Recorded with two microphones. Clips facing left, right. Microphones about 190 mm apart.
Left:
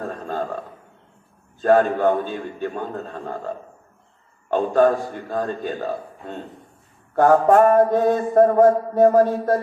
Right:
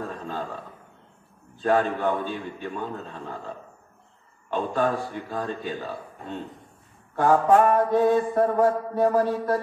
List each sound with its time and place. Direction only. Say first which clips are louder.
0.1 s mantra: left 5 dB; 50° left (ahead or behind)
1.6 s mantra: left 6 dB; 50° left (ahead or behind)